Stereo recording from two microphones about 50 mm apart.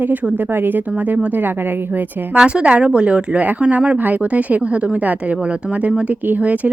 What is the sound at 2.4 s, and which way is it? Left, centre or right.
Speech, centre.